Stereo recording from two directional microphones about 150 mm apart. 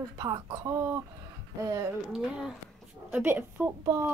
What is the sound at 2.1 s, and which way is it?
A woman's voice, 5° right (ahead or behind).